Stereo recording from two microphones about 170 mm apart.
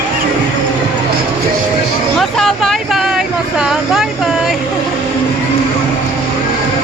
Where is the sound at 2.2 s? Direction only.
Centre (ahead or behind).